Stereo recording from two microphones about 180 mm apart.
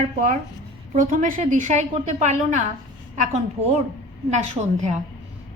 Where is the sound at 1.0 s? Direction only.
50° right (ahead or behind).